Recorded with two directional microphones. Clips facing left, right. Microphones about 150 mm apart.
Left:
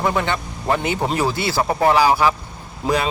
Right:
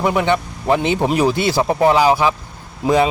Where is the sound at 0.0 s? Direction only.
15° right (ahead or behind).